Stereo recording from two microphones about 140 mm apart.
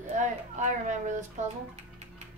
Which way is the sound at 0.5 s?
60° right (ahead or behind).